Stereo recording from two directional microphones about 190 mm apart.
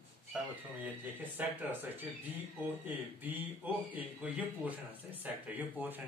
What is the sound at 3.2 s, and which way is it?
Speech, 10° right (ahead or behind).